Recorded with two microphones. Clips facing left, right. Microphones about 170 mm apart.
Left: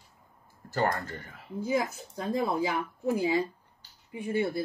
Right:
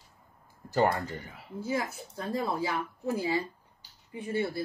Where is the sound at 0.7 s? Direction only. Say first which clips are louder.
Right 3 dB; 15° right (ahead or behind).